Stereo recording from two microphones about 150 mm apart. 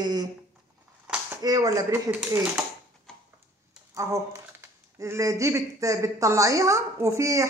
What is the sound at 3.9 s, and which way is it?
Speech, 20° right (ahead or behind).